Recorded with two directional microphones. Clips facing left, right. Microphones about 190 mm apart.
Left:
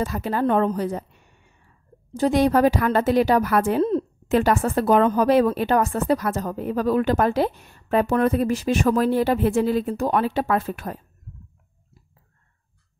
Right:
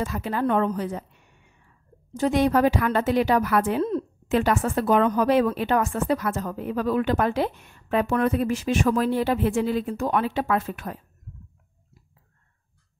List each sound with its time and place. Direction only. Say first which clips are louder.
0.0 s a woman's voice: left 3 dB; 40° left (ahead or behind)
2.1 s a woman's voice: left 2 dB; 35° left (ahead or behind)